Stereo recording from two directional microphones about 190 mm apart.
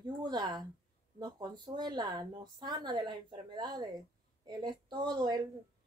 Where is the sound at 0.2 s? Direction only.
20° right (ahead or behind).